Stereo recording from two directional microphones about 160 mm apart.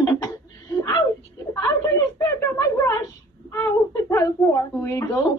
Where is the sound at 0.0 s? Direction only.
20° left (ahead or behind).